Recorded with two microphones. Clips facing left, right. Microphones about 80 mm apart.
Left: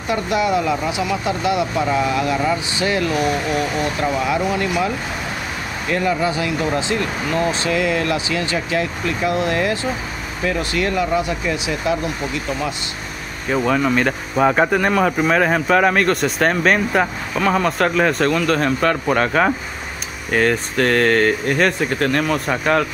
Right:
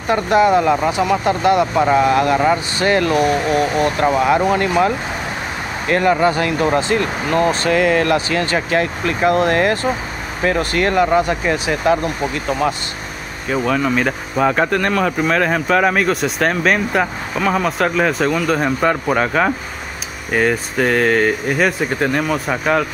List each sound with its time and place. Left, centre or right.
0.1 s speech: right
13.5 s speech: centre